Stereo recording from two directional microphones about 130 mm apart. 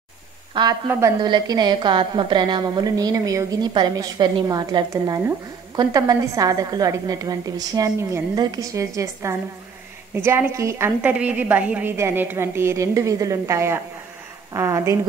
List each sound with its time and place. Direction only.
0.6 s a woman's voice: 35° right (ahead or behind)
11.0 s a woman's voice: 10° right (ahead or behind)